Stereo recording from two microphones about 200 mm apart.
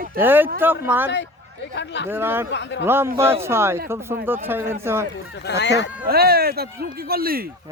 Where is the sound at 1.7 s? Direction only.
60° left (ahead or behind).